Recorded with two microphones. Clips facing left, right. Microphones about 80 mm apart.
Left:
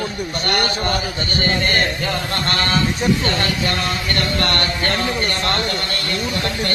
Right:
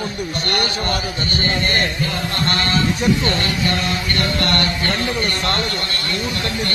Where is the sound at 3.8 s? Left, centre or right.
Left.